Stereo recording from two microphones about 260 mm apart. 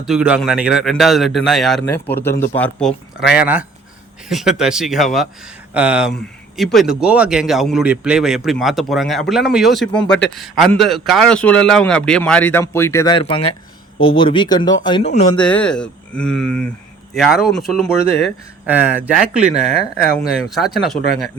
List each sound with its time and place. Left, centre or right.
0.1 s speech: centre
2.3 s speech: left
2.7 s speech: centre; by 15.3 s left
15.4 s speech: centre